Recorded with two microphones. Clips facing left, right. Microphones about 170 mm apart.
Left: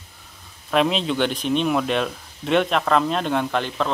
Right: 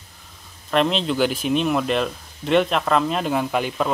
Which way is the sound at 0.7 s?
Centre (ahead or behind).